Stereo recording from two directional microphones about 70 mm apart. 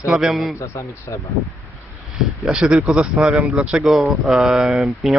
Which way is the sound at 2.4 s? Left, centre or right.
Centre.